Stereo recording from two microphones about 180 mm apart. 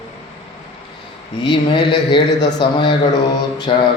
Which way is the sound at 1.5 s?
25° left (ahead or behind).